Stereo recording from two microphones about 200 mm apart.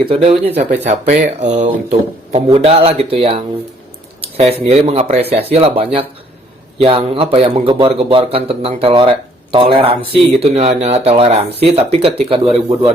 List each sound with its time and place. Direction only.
0.1 s speech: 30° right (ahead or behind)